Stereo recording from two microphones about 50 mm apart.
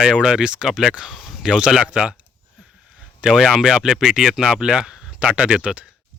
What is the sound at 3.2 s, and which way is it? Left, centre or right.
Speech, centre.